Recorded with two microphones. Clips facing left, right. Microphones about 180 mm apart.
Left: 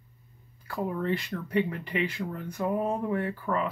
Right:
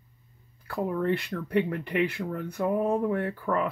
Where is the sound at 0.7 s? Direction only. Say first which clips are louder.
Right 2 dB; 60° right (ahead or behind).